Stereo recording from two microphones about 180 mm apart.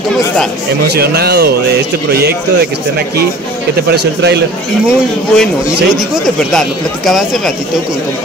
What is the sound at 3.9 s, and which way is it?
Speech, 65° right (ahead or behind).